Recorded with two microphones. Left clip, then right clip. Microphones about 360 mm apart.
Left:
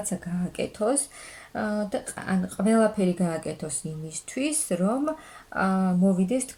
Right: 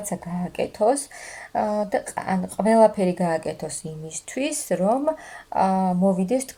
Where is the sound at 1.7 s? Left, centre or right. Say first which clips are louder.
Right 6 dB; centre.